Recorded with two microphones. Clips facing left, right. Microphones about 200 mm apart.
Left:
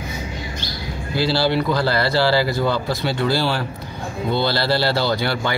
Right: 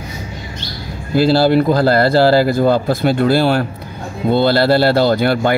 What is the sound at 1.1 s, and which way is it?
Speech, 45° right (ahead or behind).